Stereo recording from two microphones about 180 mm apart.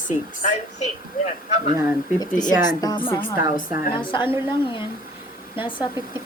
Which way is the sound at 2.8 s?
20° left (ahead or behind).